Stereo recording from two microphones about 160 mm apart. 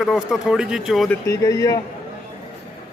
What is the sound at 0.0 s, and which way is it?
Speech, centre (ahead or behind).